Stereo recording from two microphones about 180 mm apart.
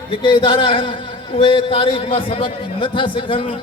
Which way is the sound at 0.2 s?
30° left (ahead or behind).